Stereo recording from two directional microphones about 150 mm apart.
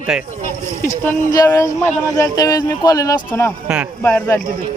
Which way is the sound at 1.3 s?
20° left (ahead or behind).